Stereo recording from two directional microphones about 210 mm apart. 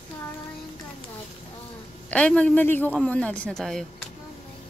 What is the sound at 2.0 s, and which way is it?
A man's voice, 5° left (ahead or behind).